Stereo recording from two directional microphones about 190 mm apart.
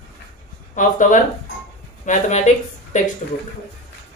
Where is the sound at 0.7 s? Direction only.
45° left (ahead or behind).